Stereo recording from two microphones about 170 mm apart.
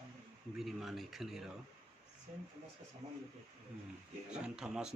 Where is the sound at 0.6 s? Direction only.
Centre (ahead or behind).